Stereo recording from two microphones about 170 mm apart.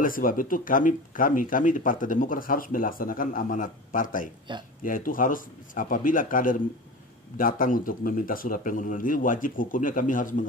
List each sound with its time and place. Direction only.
0.0 s speech: 55° left (ahead or behind)
4.5 s speech: 25° right (ahead or behind)
4.8 s speech: 55° left (ahead or behind)